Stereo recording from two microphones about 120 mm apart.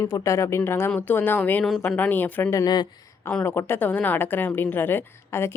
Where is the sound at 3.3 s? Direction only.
15° left (ahead or behind).